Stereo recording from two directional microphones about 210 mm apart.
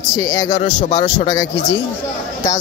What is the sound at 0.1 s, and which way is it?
A man's voice, 15° left (ahead or behind).